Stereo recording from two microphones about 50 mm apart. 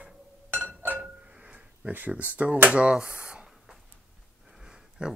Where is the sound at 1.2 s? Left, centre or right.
Right.